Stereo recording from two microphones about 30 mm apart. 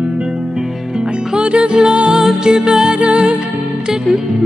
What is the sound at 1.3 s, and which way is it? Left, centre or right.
Music, right.